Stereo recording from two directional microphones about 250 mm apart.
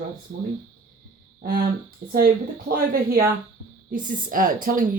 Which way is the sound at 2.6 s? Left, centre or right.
Right.